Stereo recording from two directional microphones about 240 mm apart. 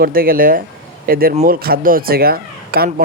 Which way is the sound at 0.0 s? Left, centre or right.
Right.